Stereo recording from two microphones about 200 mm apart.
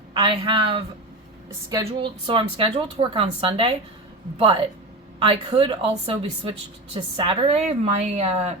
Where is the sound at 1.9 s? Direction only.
25° right (ahead or behind).